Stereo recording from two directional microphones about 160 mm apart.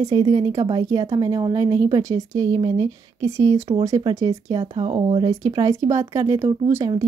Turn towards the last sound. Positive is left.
turn(degrees=-20)  # may be behind; listen again after turning